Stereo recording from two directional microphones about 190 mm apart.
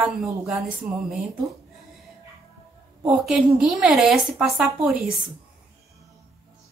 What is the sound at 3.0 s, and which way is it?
Speech, 5° right (ahead or behind).